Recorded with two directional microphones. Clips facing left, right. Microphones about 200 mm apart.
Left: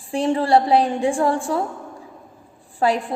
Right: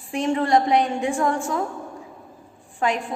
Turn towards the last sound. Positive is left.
turn(degrees=35)  # may be behind; listen again after turning